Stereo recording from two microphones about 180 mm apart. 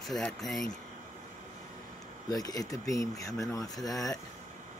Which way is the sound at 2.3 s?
20° left (ahead or behind).